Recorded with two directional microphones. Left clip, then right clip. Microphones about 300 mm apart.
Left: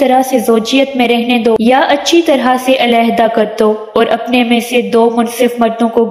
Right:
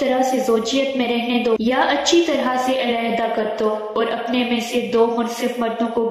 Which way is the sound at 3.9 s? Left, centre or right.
Left.